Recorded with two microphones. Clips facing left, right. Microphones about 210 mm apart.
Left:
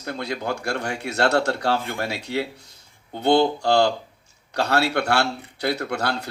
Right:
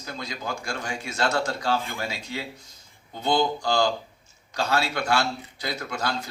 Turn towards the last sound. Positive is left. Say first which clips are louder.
# left 4 dB
turn(degrees=65)  # may be behind; listen again after turning